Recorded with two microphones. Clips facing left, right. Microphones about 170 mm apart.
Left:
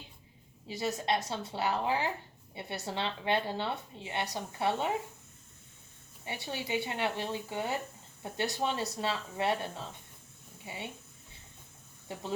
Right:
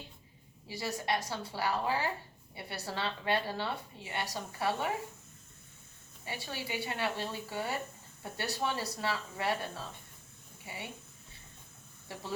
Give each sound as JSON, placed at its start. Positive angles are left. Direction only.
{"t": 0.7, "sound": "a woman's voice", "side_deg": 20}
{"t": 6.2, "sound": "a woman's voice", "side_deg": 20}